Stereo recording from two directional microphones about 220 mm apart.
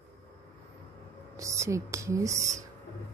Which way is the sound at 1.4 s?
15° right (ahead or behind).